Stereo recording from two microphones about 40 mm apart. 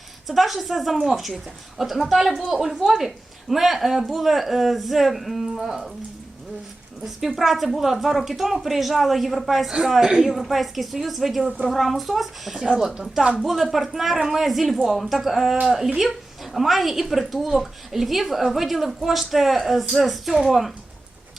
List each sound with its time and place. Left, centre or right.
0.3 s a woman's voice: centre
7.0 s a woman's voice: centre
10.3 s a woman's voice: centre
12.6 s a woman's voice: centre
13.4 s a woman's voice: centre